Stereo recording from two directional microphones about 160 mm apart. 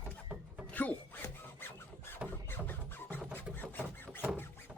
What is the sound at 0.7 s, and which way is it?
Wood, 10° left (ahead or behind).